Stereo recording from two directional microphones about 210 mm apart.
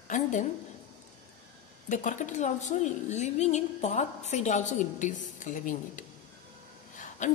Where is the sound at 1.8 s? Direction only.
35° left (ahead or behind).